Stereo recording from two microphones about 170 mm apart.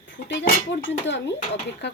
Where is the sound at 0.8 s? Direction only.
90° left.